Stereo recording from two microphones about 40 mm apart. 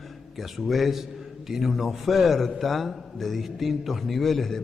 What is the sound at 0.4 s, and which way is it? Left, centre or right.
A man's voice, centre.